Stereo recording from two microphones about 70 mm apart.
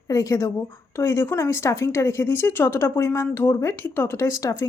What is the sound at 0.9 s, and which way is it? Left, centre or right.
Speech, left.